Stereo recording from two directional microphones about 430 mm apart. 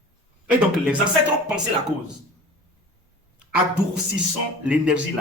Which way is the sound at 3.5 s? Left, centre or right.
Centre.